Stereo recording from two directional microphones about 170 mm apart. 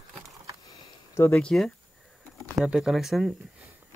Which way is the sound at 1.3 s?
5° left (ahead or behind).